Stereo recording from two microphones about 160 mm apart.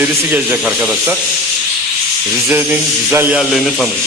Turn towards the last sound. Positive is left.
turn(degrees=-10)  # may be behind; listen again after turning